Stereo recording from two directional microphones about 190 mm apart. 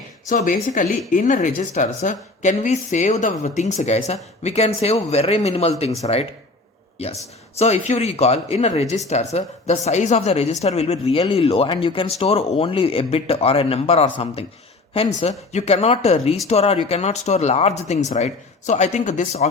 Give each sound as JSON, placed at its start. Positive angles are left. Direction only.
{"t": 0.3, "sound": "speech", "side_deg": 40}